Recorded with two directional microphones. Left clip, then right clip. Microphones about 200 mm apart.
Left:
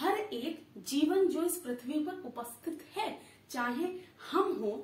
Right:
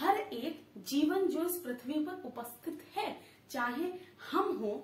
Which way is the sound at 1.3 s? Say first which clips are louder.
Left 2 dB; 5° left (ahead or behind).